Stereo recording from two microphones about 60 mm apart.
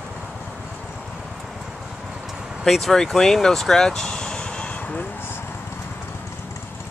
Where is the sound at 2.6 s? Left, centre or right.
Centre.